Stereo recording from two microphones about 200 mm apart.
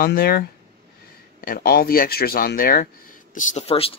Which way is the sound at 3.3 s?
30° left (ahead or behind).